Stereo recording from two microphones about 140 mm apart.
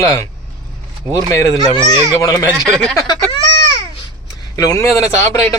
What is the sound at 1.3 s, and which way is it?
A man's voice, 20° left (ahead or behind).